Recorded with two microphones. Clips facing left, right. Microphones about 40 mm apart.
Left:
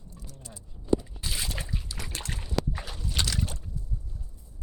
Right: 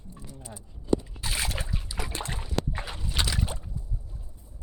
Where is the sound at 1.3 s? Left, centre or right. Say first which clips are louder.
Right 3 dB; right.